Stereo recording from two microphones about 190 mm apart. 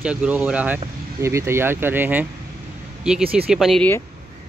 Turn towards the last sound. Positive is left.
turn(degrees=5)  # may be behind; listen again after turning